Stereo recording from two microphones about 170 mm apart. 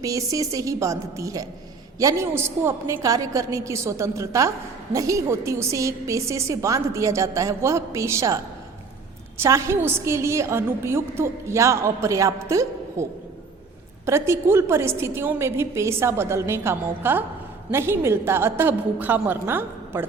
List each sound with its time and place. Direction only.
0.0 s a woman's voice: 20° right (ahead or behind)
9.4 s a woman's voice: 15° right (ahead or behind)